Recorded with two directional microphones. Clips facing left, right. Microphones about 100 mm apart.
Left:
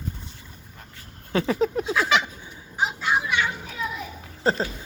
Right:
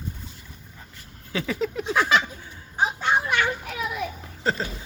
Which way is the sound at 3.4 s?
70° right (ahead or behind).